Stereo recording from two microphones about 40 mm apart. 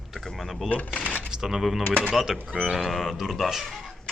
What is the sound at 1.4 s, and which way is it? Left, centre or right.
Speech, centre.